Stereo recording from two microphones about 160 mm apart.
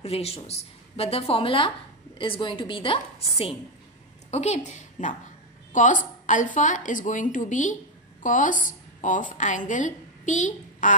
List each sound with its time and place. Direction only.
0.0 s a woman's voice: 40° left (ahead or behind)